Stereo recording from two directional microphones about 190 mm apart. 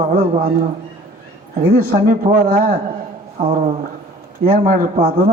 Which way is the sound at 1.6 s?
50° right (ahead or behind).